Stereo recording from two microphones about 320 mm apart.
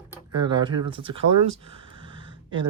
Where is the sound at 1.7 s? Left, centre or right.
Centre.